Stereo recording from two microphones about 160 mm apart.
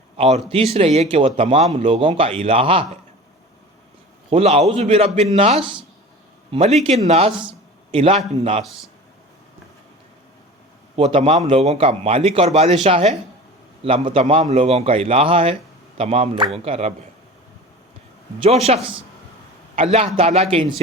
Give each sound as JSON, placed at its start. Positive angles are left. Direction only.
{"t": 0.2, "sound": "a man's voice", "side_deg": -40}
{"t": 4.3, "sound": "speech", "side_deg": -40}
{"t": 10.9, "sound": "speech", "side_deg": -40}
{"t": 18.4, "sound": "speech", "side_deg": -40}